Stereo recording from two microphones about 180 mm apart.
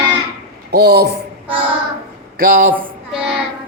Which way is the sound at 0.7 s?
60° right (ahead or behind).